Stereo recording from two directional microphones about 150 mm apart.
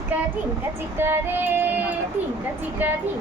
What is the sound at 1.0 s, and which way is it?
Female singing, 15° right (ahead or behind).